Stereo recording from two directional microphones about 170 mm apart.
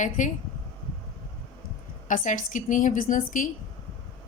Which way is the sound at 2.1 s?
50° left (ahead or behind).